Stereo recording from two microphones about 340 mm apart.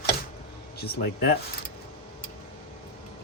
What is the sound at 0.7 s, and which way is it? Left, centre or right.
Speech, left.